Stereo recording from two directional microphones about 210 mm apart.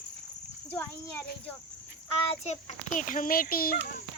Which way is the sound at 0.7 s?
10° left (ahead or behind).